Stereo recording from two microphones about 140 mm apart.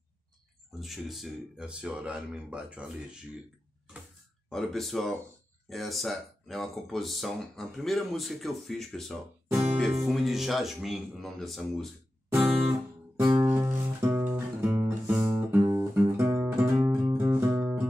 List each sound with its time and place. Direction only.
0.7 s speech: centre (ahead or behind)
4.5 s speech: centre (ahead or behind)
13.2 s music: 30° right (ahead or behind)
13.5 s music: 10° right (ahead or behind)